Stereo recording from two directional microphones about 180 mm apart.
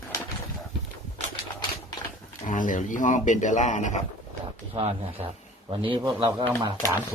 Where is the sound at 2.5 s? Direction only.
45° left (ahead or behind).